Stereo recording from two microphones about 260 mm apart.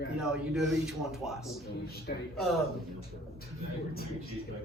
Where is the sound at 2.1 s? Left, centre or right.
Left.